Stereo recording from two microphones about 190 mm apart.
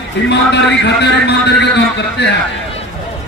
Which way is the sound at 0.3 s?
65° left (ahead or behind).